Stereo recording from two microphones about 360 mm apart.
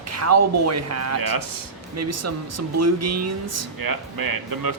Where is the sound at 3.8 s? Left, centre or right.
Right.